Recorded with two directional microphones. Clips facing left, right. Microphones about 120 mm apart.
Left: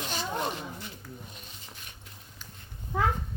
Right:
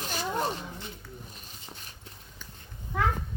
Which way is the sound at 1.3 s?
35° right (ahead or behind).